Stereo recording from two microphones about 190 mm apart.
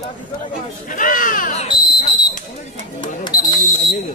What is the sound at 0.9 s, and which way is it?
Speech, 45° left (ahead or behind).